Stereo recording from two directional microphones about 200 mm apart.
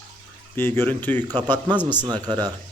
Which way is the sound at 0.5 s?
10° left (ahead or behind).